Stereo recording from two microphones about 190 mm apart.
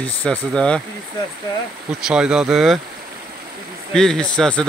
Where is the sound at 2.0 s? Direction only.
5° right (ahead or behind).